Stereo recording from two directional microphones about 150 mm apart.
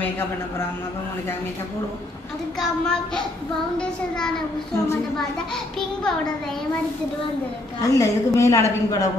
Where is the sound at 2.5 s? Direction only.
5° left (ahead or behind).